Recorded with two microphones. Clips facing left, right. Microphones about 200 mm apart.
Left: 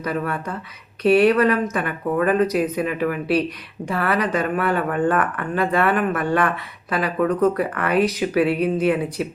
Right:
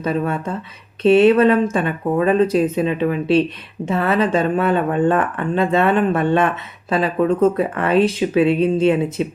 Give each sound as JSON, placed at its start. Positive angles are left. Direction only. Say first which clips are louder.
{"t": 0.0, "sound": "speech", "louder": "right 4 dB", "side_deg": -25}